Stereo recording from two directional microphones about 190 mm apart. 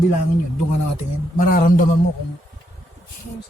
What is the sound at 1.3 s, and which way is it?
Speech, 50° left (ahead or behind).